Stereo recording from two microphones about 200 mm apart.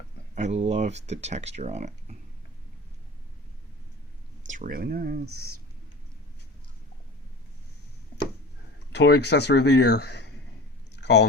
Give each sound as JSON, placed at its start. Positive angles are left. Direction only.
{"t": 0.3, "sound": "speech", "side_deg": -35}
{"t": 4.4, "sound": "speech", "side_deg": -40}
{"t": 8.9, "sound": "speech", "side_deg": 55}
{"t": 10.9, "sound": "a sound", "side_deg": 55}